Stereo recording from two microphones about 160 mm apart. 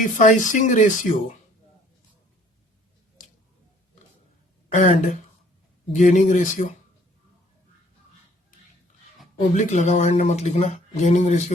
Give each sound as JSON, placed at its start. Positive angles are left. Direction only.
{"t": 0.0, "sound": "speech", "side_deg": 50}
{"t": 4.7, "sound": "speech", "side_deg": 55}
{"t": 9.6, "sound": "speech", "side_deg": 50}